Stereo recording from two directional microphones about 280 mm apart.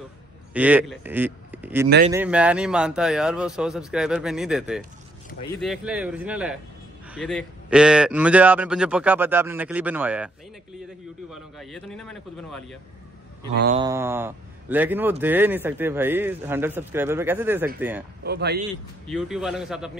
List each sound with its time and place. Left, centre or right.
0.5 s a man's voice: centre
13.7 s speech: centre
18.2 s speech: right
19.0 s a man's voice: centre